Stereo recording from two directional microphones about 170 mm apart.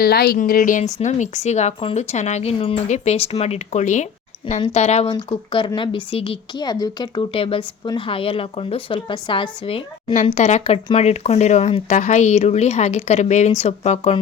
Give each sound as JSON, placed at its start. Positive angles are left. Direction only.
{"t": 0.0, "sound": "speech", "side_deg": 65}